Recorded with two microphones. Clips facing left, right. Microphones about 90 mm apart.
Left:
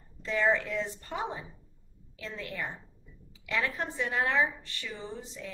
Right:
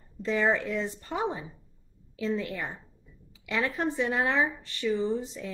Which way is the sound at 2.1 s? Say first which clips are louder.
Right 8 dB; 10° right (ahead or behind).